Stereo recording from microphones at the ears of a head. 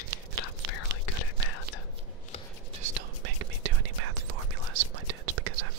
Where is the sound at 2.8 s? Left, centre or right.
Right.